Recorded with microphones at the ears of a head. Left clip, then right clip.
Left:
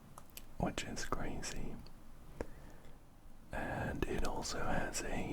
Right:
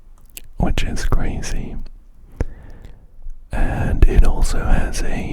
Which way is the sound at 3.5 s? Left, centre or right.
Right.